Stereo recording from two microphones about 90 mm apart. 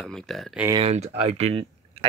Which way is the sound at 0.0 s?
5° left (ahead or behind).